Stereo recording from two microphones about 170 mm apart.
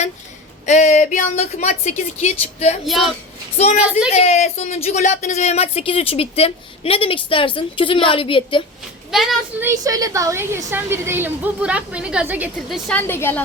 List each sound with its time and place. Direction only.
0.6 s speech: 45° left (ahead or behind)
2.8 s speech: centre (ahead or behind)
4.1 s speech: 40° left (ahead or behind)
9.1 s speech: centre (ahead or behind)
9.6 s a woman's voice: 20° right (ahead or behind); by 13.0 s centre (ahead or behind)
13.0 s a woman's voice: 15° left (ahead or behind)